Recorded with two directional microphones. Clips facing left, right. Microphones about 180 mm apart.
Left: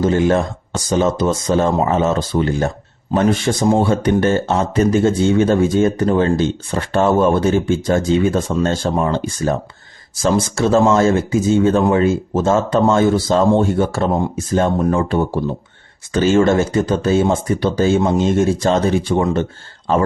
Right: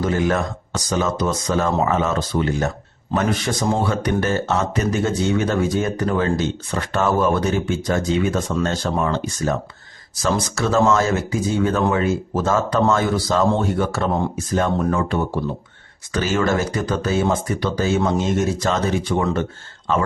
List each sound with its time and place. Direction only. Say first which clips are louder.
0.0 s speech: left 5 dB; 25° left (ahead or behind)